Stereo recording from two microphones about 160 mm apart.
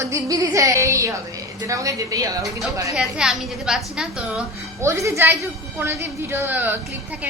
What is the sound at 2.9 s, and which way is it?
A woman's voice, 5° right (ahead or behind).